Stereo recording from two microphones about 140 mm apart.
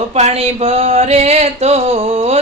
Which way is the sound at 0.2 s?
50° right (ahead or behind).